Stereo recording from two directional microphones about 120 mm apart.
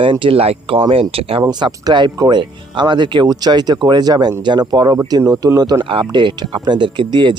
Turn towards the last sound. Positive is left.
turn(degrees=-40)  # may be behind; listen again after turning